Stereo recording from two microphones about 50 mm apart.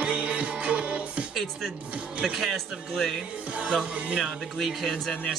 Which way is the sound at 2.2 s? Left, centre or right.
Centre.